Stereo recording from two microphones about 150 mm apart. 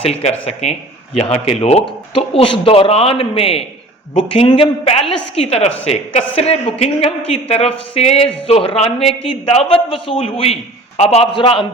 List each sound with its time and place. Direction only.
0.0 s a woman's voice: 45° left (ahead or behind)